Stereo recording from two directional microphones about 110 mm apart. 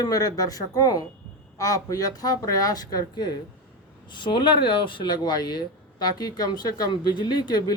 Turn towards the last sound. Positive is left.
turn(degrees=40)  # may be behind; listen again after turning